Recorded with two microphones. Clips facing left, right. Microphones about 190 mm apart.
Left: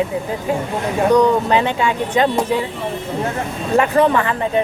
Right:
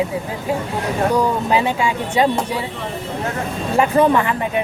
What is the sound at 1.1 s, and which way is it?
Speech, 10° right (ahead or behind).